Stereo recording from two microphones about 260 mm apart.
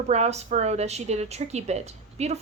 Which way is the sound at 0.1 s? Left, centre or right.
Right.